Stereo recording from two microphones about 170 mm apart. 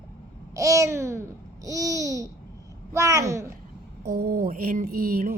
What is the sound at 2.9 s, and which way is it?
Speech, 20° right (ahead or behind).